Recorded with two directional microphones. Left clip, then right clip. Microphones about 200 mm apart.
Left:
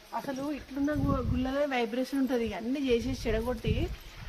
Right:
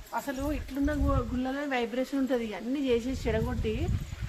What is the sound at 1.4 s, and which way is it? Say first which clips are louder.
Speech: left 2 dB; 35° left (ahead or behind).